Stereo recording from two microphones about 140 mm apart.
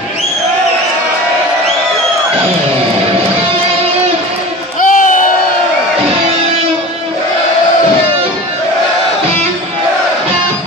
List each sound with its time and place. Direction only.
4.7 s crowd: 70° left (ahead or behind)